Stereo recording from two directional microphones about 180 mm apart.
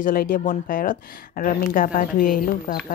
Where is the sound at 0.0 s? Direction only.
50° left (ahead or behind).